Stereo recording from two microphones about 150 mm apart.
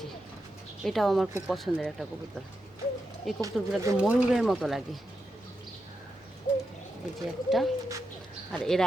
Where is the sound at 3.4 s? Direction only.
20° right (ahead or behind).